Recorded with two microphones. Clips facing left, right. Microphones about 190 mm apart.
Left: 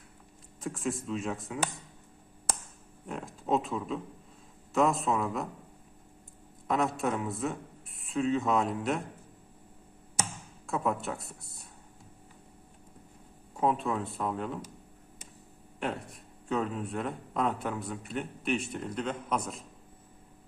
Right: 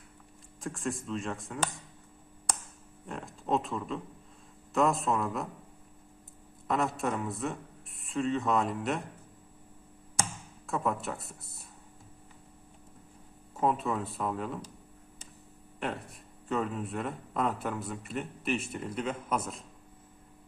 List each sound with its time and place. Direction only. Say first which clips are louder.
0.6 s a man's voice: left 1 dB; centre (ahead or behind)
3.1 s a man's voice: left 1 dB; centre (ahead or behind)
6.7 s a man's voice: left 1 dB; centre (ahead or behind)
10.7 s a man's voice: left 1 dB; centre (ahead or behind)
13.6 s a man's voice: even; centre (ahead or behind)
15.8 s a man's voice: left 1 dB; centre (ahead or behind)